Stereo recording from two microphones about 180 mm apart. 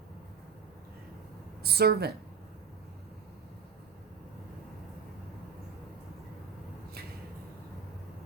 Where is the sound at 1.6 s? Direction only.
60° right (ahead or behind).